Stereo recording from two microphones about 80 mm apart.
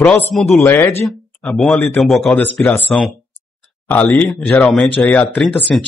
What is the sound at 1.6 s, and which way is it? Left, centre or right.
A man's voice, centre.